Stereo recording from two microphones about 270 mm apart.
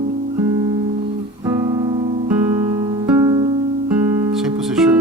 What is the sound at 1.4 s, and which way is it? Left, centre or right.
Music, centre.